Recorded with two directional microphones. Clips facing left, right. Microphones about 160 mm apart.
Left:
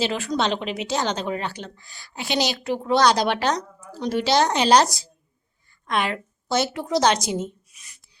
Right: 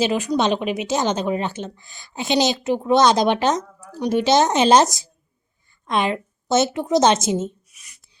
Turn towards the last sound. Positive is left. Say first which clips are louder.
# right 4 dB
turn(degrees=-20)  # may be behind; listen again after turning